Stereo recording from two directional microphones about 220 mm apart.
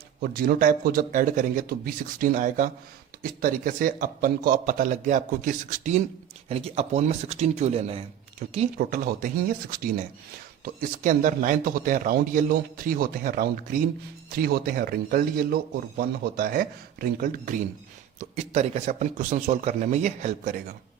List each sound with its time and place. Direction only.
0.2 s a man's voice: 40° right (ahead or behind)
10.6 s a man's voice: 35° right (ahead or behind)